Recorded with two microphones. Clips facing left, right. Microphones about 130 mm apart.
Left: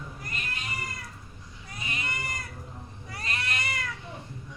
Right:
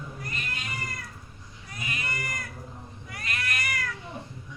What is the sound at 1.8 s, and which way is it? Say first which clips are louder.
Cat: right 1 dB; 25° left (ahead or behind).